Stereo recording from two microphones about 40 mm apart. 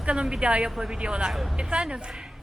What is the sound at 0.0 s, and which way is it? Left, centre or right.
A woman's voice, right.